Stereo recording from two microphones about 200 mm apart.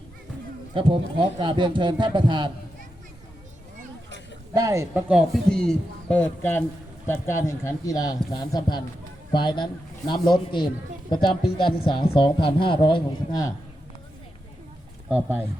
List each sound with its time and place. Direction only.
0.7 s a man's voice: 25° right (ahead or behind)
4.5 s a man's voice: 15° right (ahead or behind); by 13.5 s 20° left (ahead or behind)
15.1 s speech: 10° right (ahead or behind)